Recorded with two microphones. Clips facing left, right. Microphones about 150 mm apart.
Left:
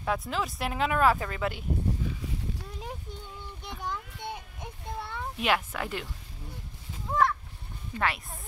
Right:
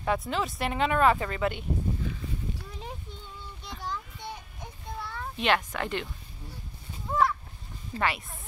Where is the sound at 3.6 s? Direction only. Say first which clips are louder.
Left 1 dB; 20° left (ahead or behind).